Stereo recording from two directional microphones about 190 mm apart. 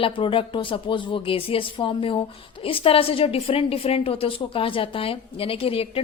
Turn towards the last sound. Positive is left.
turn(degrees=30)  # may be behind; listen again after turning